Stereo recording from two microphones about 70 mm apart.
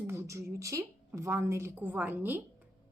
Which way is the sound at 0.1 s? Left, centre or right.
Right.